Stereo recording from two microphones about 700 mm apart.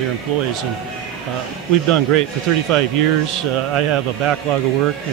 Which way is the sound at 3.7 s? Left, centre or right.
Right.